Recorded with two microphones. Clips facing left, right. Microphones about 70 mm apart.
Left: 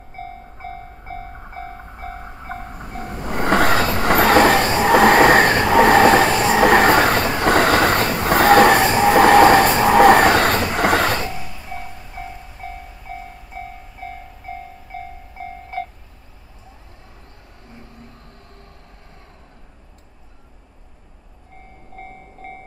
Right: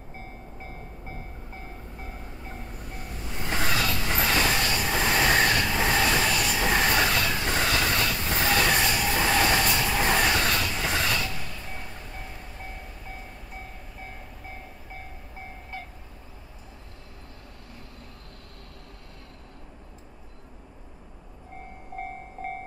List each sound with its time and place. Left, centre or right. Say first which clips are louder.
0.2 s train: left 12 dB; left
4.0 s vehicle: left 16 dB; left
4.8 s train: left 15 dB; left
7.3 s train: left 11 dB; left
8.2 s train: left 18 dB; left
10.7 s a sound: left 11 dB; left
11.3 s music: left 5 dB; centre
22.4 s train: right 2 dB; centre